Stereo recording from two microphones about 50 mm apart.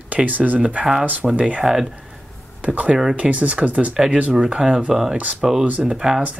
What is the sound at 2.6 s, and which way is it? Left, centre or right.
Speech, right.